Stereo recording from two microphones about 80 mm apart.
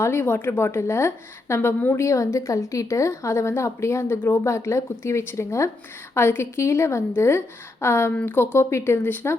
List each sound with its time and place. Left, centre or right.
0.0 s speech: left